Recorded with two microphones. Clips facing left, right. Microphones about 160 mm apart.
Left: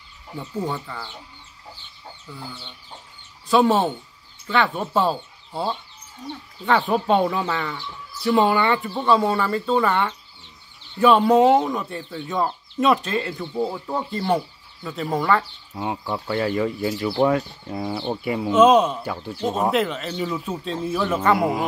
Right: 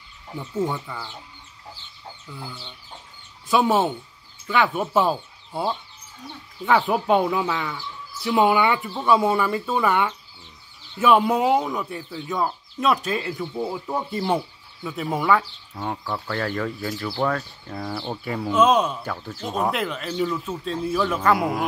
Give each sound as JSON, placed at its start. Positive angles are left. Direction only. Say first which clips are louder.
{"t": 0.7, "sound": "speech", "louder": "left 1 dB", "side_deg": -10}
{"t": 3.4, "sound": "speech", "louder": "left 2 dB", "side_deg": -5}
{"t": 6.9, "sound": "speech", "louder": "left 1 dB", "side_deg": -5}
{"t": 16.0, "sound": "speech", "louder": "left 5 dB", "side_deg": 15}